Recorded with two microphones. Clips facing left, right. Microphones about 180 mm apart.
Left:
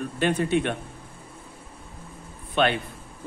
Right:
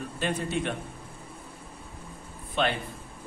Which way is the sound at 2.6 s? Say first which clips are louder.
Left 5 dB; 70° left (ahead or behind).